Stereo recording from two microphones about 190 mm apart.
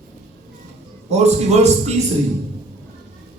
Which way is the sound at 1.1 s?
35° right (ahead or behind).